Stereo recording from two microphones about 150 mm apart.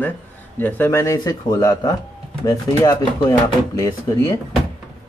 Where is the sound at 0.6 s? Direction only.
10° left (ahead or behind).